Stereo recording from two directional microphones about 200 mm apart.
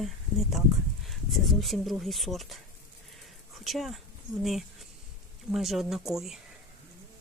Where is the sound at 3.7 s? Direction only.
Centre (ahead or behind).